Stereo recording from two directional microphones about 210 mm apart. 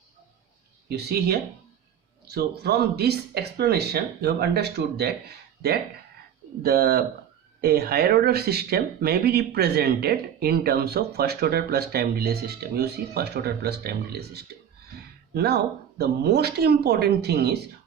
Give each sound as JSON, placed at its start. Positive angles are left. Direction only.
{"t": 0.9, "sound": "speech", "side_deg": -50}
{"t": 6.6, "sound": "speech", "side_deg": -50}